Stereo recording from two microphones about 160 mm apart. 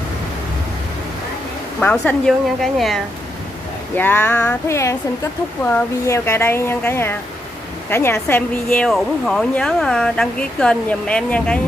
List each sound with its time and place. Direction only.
1.8 s a woman's voice: 10° left (ahead or behind)
3.9 s a woman's voice: 10° left (ahead or behind)